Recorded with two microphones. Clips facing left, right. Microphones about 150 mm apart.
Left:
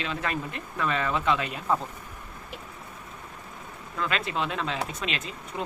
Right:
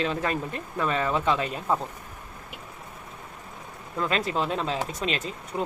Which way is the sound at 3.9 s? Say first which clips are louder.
Right 3 dB; 35° right (ahead or behind).